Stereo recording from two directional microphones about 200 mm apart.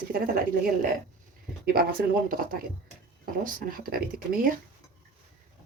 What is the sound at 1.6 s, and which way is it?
Speech, 50° right (ahead or behind).